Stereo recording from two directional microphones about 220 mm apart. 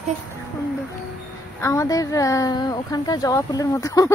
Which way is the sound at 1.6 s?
15° left (ahead or behind).